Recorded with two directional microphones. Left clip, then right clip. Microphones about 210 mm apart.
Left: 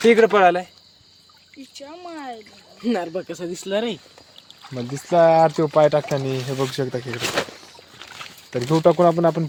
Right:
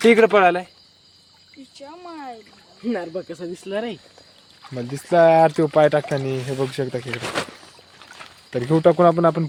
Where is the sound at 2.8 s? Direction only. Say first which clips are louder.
Left 2 dB; 30° left (ahead or behind).